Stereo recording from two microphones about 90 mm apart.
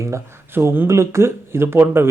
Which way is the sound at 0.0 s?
30° right (ahead or behind).